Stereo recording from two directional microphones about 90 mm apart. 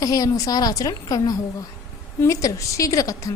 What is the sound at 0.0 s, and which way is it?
A woman's voice, 40° left (ahead or behind).